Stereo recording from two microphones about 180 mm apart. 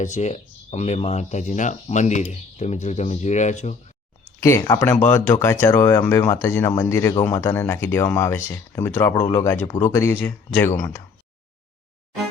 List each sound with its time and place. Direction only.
0.0 s speech: 40° left (ahead or behind)
4.4 s speech: 15° left (ahead or behind)